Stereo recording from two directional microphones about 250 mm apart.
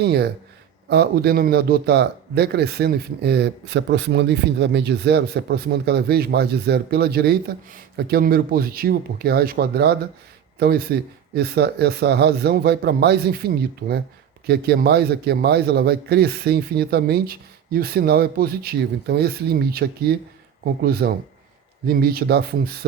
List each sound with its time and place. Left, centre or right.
0.0 s a man's voice: right